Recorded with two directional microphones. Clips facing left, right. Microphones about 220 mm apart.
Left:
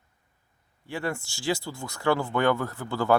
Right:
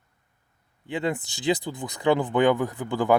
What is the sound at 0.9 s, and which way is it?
Speech, 20° right (ahead or behind).